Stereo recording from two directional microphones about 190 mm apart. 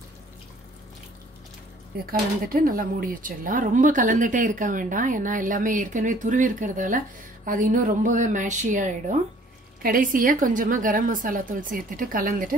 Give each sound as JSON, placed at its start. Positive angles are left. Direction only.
{"t": 2.0, "sound": "speech", "side_deg": -50}